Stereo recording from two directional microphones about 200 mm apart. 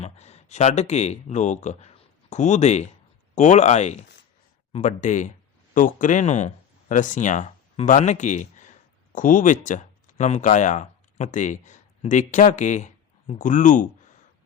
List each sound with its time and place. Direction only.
0.0 s speech: 35° left (ahead or behind)